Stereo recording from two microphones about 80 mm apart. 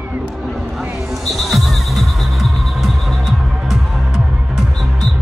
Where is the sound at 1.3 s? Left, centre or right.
Centre.